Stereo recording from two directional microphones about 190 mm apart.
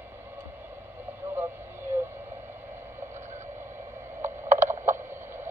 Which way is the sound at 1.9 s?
10° right (ahead or behind).